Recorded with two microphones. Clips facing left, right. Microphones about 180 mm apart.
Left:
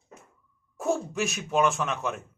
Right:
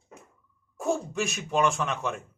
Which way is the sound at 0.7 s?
Centre (ahead or behind).